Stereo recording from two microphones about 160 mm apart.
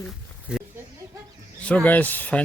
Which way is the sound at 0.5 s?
5° right (ahead or behind).